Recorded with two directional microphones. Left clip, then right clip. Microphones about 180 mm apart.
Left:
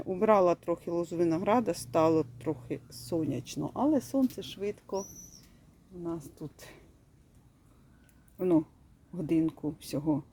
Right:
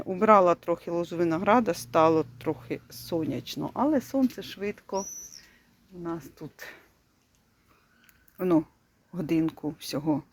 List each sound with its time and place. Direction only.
0.0 s speech: 15° left (ahead or behind)
6.1 s speech: 10° left (ahead or behind)
8.4 s speech: 10° left (ahead or behind)